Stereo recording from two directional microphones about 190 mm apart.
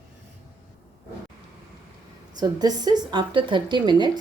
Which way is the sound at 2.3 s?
20° right (ahead or behind).